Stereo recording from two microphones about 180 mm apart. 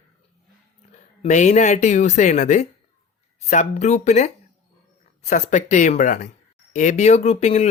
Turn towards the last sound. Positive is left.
turn(degrees=35)  # may be behind; listen again after turning